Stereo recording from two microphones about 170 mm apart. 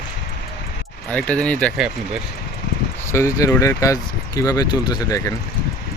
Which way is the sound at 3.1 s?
15° left (ahead or behind).